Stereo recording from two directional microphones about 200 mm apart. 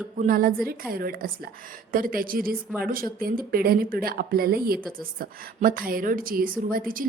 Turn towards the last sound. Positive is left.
turn(degrees=-45)  # may be behind; listen again after turning